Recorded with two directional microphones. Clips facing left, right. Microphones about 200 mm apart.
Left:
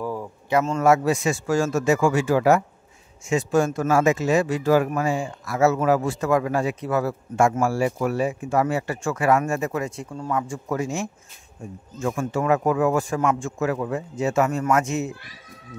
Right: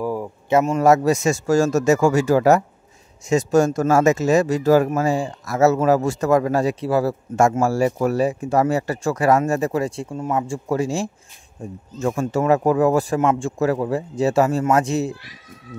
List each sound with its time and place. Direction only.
0.0 s a sound: 10° right (ahead or behind)
0.5 s a man's voice: 20° right (ahead or behind)
0.8 s speech: 40° right (ahead or behind)